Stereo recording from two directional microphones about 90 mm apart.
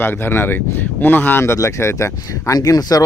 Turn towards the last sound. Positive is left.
turn(degrees=45)  # may be behind; listen again after turning